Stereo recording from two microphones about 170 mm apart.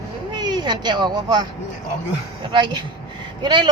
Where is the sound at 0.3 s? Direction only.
25° right (ahead or behind).